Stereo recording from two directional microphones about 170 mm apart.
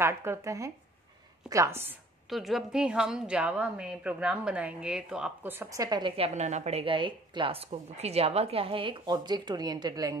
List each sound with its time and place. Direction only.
0.0 s speech: 15° right (ahead or behind)
2.2 s a woman's voice: centre (ahead or behind); by 10.1 s 25° right (ahead or behind)